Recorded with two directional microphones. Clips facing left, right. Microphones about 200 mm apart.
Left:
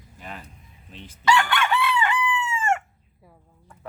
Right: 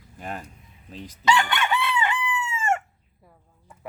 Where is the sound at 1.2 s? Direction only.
20° right (ahead or behind).